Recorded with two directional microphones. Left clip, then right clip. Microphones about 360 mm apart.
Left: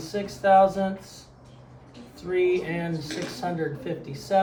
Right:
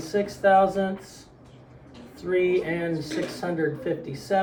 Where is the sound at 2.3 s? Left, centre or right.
Centre.